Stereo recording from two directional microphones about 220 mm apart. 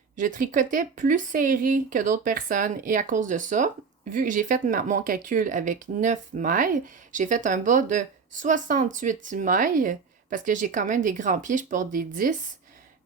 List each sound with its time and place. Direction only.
0.2 s speech: 35° right (ahead or behind)